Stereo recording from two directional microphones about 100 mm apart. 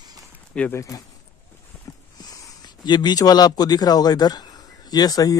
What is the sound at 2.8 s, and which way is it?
Speech, 45° left (ahead or behind).